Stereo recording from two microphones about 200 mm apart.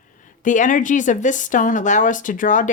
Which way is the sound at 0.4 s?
40° left (ahead or behind).